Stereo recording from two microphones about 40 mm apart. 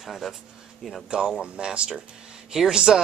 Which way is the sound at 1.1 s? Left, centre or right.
Right.